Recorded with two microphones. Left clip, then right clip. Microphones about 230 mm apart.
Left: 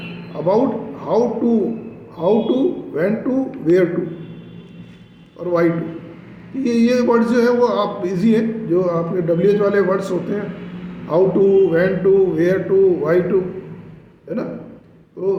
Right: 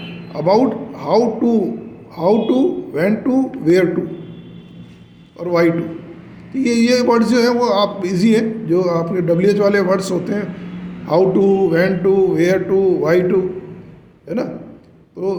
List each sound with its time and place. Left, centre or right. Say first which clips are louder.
0.3 s speech: right 2 dB; right
5.4 s speech: right 2 dB; right